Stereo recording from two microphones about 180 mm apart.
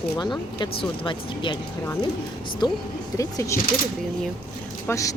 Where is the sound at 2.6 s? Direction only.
25° left (ahead or behind).